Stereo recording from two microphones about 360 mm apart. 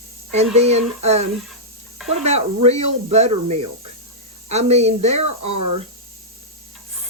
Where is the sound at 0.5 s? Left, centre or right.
Centre.